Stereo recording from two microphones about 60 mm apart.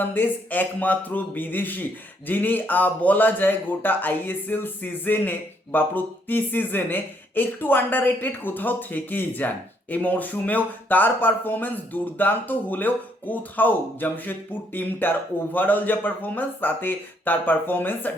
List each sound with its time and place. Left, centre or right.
0.0 s speech: left